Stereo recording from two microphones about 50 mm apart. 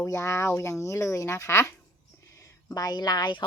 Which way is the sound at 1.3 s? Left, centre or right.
Left.